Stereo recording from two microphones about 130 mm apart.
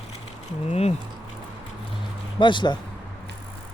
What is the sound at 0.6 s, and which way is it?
Speech, 55° left (ahead or behind).